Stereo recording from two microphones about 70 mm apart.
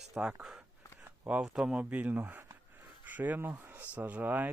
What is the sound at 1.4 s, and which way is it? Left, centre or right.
Speech, centre.